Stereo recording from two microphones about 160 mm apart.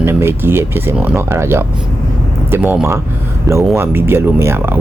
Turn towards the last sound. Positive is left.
turn(degrees=-15)  # may be behind; listen again after turning